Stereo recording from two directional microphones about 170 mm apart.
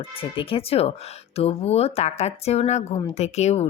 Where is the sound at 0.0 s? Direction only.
35° left (ahead or behind).